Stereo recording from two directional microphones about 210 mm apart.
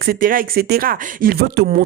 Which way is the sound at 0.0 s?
45° right (ahead or behind).